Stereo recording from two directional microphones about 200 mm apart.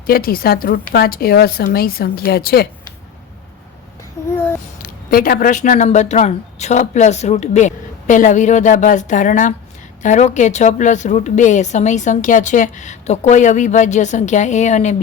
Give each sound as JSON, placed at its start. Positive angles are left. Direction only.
{"t": 0.1, "sound": "a woman's voice", "side_deg": 50}
{"t": 4.8, "sound": "a woman's voice", "side_deg": 45}